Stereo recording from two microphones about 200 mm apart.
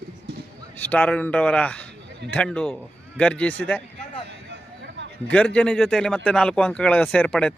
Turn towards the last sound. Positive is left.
turn(degrees=5)  # may be behind; listen again after turning